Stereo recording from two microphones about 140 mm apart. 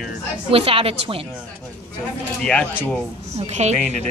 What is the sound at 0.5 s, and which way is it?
Speech, 40° right (ahead or behind).